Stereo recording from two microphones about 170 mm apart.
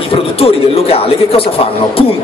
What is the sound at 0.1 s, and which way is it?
A man's voice, 35° left (ahead or behind).